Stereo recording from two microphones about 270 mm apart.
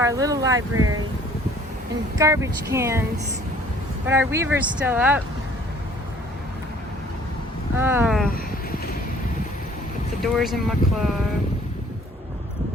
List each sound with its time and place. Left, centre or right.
0.0 s speech: centre
0.8 s speech: right
2.1 s speech: centre
4.0 s speech: centre
7.8 s speech: centre
10.3 s speech: centre